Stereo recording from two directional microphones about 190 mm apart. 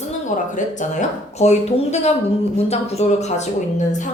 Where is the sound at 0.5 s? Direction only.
40° left (ahead or behind).